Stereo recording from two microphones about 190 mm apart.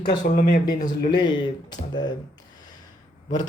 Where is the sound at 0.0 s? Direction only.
45° left (ahead or behind).